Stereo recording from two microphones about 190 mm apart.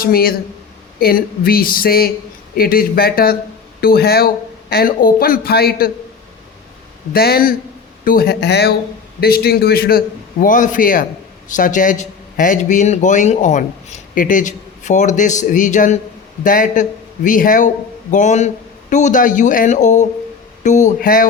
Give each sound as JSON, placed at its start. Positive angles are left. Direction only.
{"t": 0.0, "sound": "a man's voice", "side_deg": 50}
{"t": 7.1, "sound": "a man's voice", "side_deg": 50}